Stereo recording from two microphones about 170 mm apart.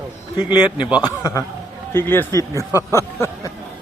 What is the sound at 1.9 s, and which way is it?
Speech, 15° left (ahead or behind).